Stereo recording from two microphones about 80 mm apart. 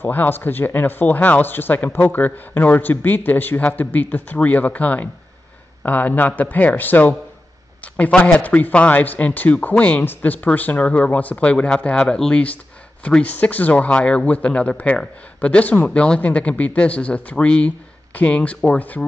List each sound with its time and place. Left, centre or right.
0.0 s speech: left